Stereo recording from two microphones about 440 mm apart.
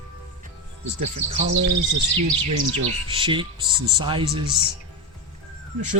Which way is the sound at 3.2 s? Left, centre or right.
Centre.